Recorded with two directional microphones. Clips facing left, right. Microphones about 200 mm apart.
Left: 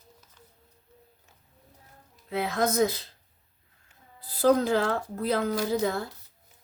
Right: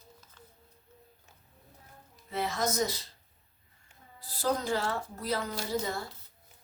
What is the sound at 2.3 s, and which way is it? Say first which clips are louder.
Speech: left 5 dB; 55° left (ahead or behind).